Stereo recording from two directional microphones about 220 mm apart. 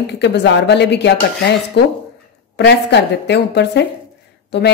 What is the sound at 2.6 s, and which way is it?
A woman's voice, 50° left (ahead or behind).